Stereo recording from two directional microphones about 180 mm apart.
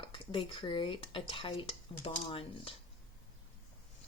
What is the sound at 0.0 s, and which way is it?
Speech, 25° left (ahead or behind).